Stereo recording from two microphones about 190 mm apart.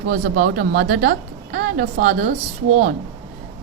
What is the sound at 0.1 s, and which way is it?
Speech, 50° right (ahead or behind).